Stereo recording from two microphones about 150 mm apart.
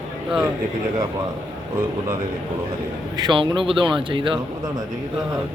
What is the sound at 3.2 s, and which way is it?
A man's voice, 30° right (ahead or behind).